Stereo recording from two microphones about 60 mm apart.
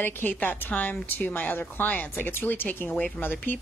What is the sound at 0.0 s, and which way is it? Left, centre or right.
A woman's voice, left.